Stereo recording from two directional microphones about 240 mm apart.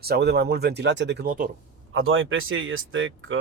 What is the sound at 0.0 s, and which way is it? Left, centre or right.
Speech, right.